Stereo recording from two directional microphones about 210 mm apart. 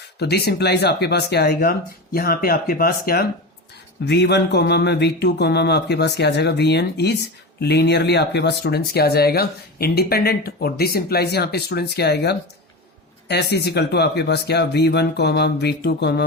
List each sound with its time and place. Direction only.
0.2 s speech: 50° left (ahead or behind)